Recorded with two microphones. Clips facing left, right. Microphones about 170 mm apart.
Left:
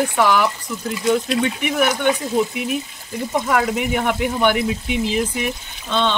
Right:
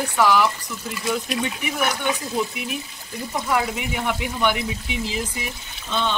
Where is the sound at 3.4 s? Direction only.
50° left (ahead or behind).